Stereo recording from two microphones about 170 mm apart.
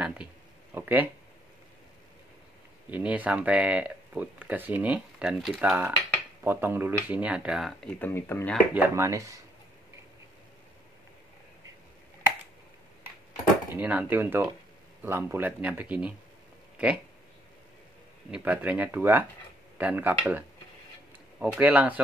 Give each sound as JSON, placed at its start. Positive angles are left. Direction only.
{"t": 0.7, "sound": "a sound", "side_deg": -10}
{"t": 2.9, "sound": "speech", "side_deg": -10}
{"t": 8.0, "sound": "speech", "side_deg": 15}
{"t": 8.7, "sound": "speech", "side_deg": -15}
{"t": 13.7, "sound": "speech", "side_deg": -10}
{"t": 18.3, "sound": "speech", "side_deg": -10}